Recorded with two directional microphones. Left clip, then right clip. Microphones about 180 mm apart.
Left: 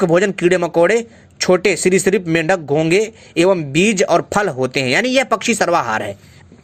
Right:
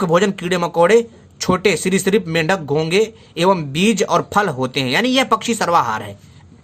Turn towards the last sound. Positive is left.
turn(degrees=20)  # may be behind; listen again after turning